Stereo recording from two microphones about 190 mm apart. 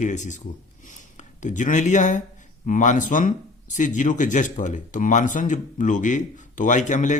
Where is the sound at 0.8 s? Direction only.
40° left (ahead or behind).